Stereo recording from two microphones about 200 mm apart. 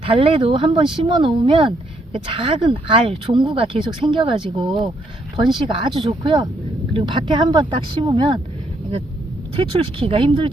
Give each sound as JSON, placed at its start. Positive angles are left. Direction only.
{"t": 0.0, "sound": "speech", "side_deg": -25}
{"t": 9.6, "sound": "speech", "side_deg": -25}